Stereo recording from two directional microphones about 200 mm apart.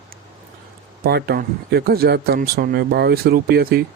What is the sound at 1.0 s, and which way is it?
Speech, 50° right (ahead or behind).